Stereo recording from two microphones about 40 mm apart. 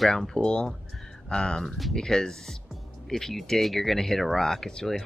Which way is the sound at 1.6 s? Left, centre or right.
Centre.